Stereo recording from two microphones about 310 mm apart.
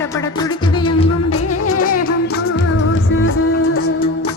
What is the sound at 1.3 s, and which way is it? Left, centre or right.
Music, left.